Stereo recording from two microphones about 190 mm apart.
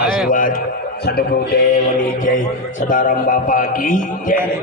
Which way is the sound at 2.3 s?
45° left (ahead or behind).